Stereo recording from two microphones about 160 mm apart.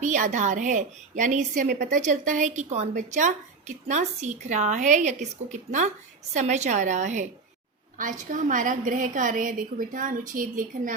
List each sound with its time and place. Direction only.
0.0 s a woman's voice: 50° right (ahead or behind)